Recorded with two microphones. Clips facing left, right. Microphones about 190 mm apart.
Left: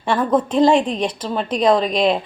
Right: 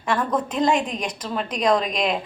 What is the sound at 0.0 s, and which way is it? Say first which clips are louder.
A woman's voice: left 5 dB; 30° left (ahead or behind).